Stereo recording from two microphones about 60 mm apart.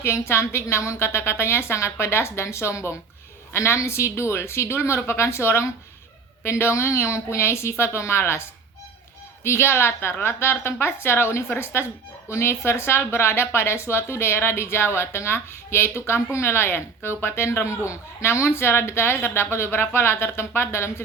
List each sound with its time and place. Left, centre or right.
0.0 s a woman's voice: left